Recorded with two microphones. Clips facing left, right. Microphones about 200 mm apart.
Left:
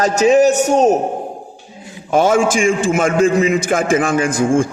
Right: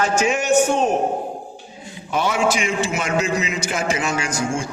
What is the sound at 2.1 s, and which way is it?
A man's voice, 45° left (ahead or behind).